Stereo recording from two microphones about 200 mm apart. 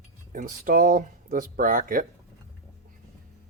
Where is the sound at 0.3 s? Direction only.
45° right (ahead or behind).